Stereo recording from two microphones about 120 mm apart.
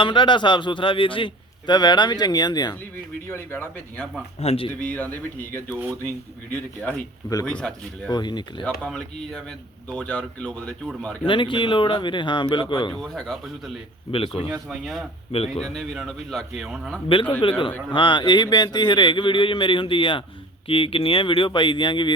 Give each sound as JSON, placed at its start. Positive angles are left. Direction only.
{"t": 0.0, "sound": "a man's voice", "side_deg": 45}
{"t": 3.2, "sound": "speech", "side_deg": 20}
{"t": 4.4, "sound": "speech", "side_deg": 55}
{"t": 4.8, "sound": "speech", "side_deg": 10}
{"t": 7.4, "sound": "speech", "side_deg": 10}
{"t": 8.1, "sound": "a man's voice", "side_deg": 40}
{"t": 8.6, "sound": "speech", "side_deg": 10}
{"t": 11.3, "sound": "a man's voice", "side_deg": 45}
{"t": 12.9, "sound": "speech", "side_deg": 5}
{"t": 14.1, "sound": "speech", "side_deg": 55}
{"t": 14.7, "sound": "speech", "side_deg": 0}
{"t": 15.3, "sound": "speech", "side_deg": 55}
{"t": 15.6, "sound": "speech", "side_deg": 0}
{"t": 17.1, "sound": "a man's voice", "side_deg": 45}